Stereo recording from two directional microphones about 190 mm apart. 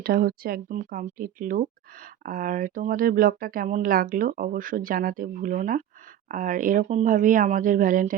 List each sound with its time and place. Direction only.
0.0 s speech: 55° right (ahead or behind)